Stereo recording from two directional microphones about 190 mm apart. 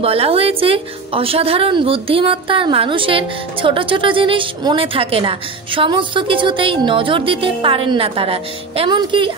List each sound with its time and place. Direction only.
0.0 s a woman's voice: 30° right (ahead or behind)